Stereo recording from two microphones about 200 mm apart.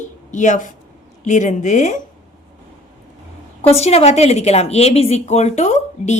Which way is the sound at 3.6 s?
30° left (ahead or behind).